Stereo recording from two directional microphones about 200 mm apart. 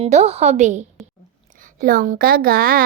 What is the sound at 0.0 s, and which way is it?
A woman's voice, 30° right (ahead or behind).